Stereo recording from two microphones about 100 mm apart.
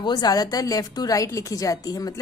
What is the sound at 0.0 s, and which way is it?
A woman's voice, 45° left (ahead or behind).